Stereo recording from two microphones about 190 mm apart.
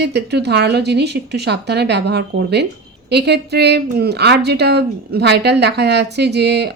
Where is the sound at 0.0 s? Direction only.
60° right (ahead or behind).